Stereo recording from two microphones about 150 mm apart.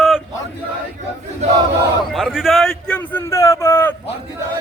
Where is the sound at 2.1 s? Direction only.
5° right (ahead or behind); by 3.9 s 15° left (ahead or behind).